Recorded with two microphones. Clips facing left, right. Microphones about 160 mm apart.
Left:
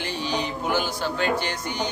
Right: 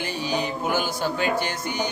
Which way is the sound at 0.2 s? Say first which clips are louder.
Right 2 dB; 10° right (ahead or behind).